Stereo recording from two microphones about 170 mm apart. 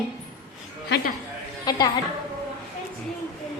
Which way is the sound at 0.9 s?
70° left (ahead or behind).